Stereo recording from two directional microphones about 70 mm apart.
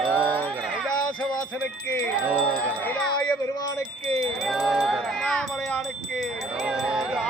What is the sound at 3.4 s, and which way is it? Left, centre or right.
Wind chime, left.